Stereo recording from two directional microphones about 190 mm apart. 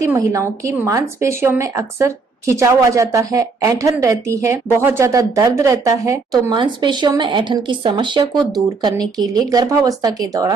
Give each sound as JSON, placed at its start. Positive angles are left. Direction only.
{"t": 0.0, "sound": "speech", "side_deg": -15}